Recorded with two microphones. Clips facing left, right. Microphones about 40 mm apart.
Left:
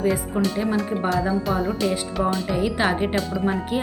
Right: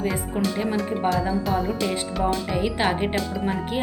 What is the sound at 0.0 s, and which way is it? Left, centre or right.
Speech, centre.